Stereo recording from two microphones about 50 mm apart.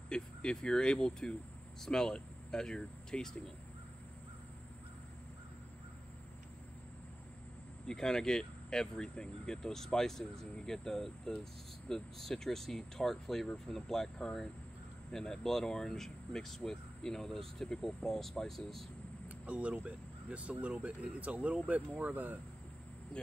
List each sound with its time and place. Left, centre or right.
0.1 s speech: centre
7.8 s speech: centre
19.2 s speech: right